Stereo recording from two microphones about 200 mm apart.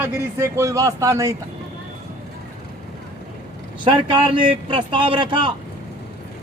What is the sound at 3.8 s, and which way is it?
Speech, 25° right (ahead or behind).